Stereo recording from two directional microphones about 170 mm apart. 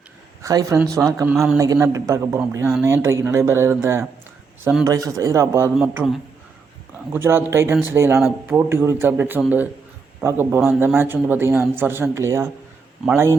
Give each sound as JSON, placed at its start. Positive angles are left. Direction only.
{"t": 0.4, "sound": "speech", "side_deg": -20}
{"t": 1.3, "sound": "a man's voice", "side_deg": -5}
{"t": 1.5, "sound": "a man's voice", "side_deg": -20}
{"t": 4.9, "sound": "a man's voice", "side_deg": -20}
{"t": 7.1, "sound": "a man's voice", "side_deg": -15}